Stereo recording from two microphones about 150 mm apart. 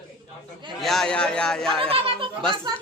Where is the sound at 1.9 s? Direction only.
40° right (ahead or behind).